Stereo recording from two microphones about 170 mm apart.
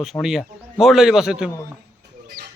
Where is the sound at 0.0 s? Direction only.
Centre (ahead or behind).